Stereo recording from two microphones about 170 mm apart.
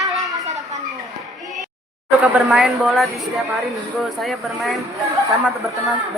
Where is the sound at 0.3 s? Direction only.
20° right (ahead or behind).